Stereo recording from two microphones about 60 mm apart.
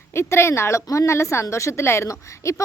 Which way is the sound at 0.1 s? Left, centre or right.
Left.